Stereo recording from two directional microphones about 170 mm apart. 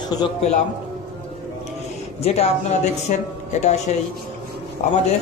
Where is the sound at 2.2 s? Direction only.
40° left (ahead or behind).